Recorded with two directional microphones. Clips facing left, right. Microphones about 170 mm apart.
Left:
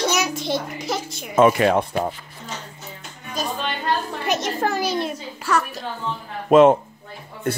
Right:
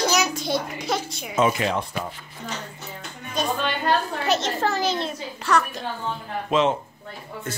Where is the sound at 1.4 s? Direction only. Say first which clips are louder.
Left 6 dB; 55° left (ahead or behind).